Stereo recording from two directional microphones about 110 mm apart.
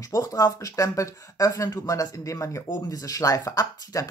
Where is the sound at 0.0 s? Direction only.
30° left (ahead or behind).